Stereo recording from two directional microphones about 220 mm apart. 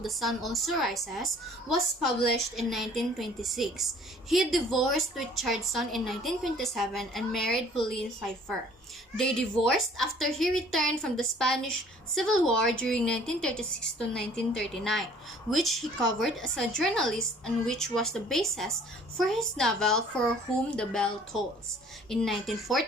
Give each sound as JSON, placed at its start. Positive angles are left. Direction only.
{"t": 0.0, "sound": "a woman's voice", "side_deg": 0}
{"t": 9.1, "sound": "a woman's voice", "side_deg": 0}
{"t": 22.1, "sound": "a woman's voice", "side_deg": 0}